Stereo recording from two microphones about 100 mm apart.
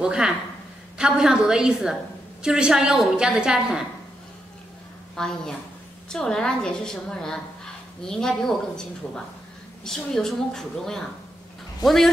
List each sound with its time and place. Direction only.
0.0 s a woman's voice: 5° right (ahead or behind)
5.1 s a woman's voice: 5° left (ahead or behind)